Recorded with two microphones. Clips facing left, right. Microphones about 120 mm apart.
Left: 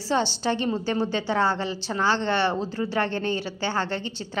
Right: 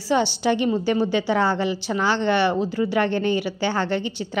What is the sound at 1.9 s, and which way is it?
A woman's voice, 15° right (ahead or behind).